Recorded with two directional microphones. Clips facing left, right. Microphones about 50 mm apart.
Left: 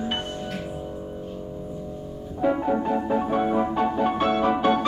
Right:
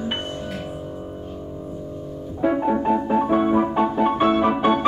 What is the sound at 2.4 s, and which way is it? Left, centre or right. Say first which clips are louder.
Music: right 3 dB; right.